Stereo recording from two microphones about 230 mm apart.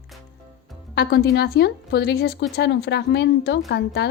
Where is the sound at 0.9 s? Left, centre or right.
Left.